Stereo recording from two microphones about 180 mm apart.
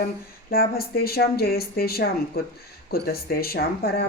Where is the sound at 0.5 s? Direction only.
55° left (ahead or behind).